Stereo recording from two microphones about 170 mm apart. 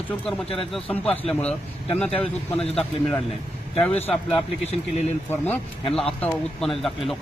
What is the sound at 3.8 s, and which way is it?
Speech, 10° left (ahead or behind).